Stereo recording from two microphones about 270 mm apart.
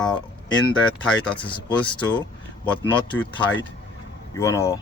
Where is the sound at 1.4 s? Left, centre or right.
Centre.